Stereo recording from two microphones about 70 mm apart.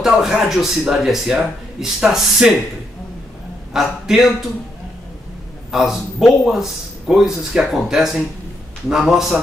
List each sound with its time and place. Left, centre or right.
0.0 s a man's voice: centre
3.7 s a man's voice: centre
5.7 s a man's voice: centre